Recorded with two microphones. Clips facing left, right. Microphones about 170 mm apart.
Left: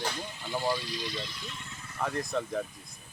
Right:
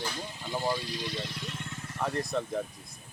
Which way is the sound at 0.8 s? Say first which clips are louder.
Right 1 dB; 55° right (ahead or behind).